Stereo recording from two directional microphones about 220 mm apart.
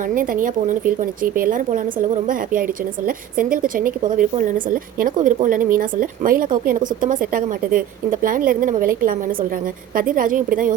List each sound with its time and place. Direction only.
0.1 s speech: 40° right (ahead or behind)